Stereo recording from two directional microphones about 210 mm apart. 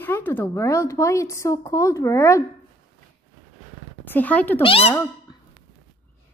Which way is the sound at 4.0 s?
10° left (ahead or behind).